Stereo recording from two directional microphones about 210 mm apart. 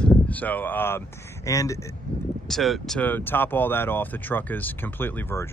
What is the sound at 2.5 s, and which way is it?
Speech, centre (ahead or behind).